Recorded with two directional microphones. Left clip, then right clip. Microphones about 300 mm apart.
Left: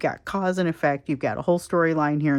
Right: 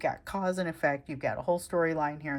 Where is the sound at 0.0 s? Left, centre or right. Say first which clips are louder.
Left 6 dB; centre.